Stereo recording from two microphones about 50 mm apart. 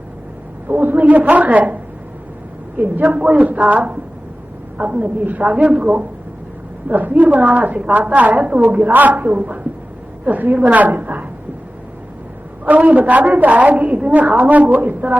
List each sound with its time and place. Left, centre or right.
0.7 s a woman's voice: right
6.8 s a woman's voice: right
12.6 s a woman's voice: right